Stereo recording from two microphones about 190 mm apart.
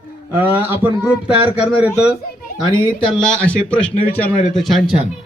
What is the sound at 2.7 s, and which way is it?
Speech, 25° left (ahead or behind).